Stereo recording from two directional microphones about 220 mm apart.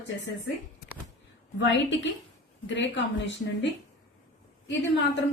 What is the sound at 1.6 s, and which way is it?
A woman's voice, 55° left (ahead or behind).